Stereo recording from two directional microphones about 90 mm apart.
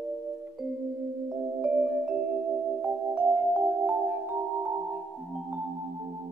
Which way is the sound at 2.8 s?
15° right (ahead or behind).